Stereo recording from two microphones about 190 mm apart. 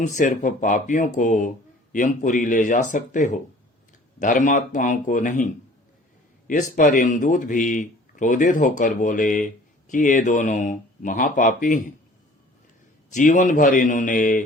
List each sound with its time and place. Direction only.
0.0 s speech: 40° left (ahead or behind)
6.5 s speech: 45° left (ahead or behind)
13.1 s speech: 40° left (ahead or behind)